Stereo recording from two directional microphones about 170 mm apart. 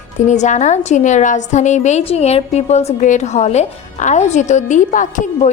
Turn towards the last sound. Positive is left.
turn(degrees=45)  # may be behind; listen again after turning